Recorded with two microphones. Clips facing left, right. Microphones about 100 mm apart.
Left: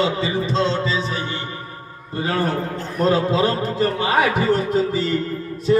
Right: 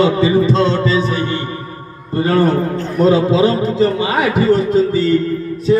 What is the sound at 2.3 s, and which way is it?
Speech, 35° right (ahead or behind).